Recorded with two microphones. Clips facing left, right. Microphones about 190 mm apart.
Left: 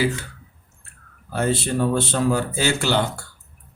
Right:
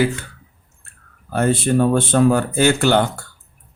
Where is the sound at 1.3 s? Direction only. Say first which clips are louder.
Right 5 dB; 55° right (ahead or behind).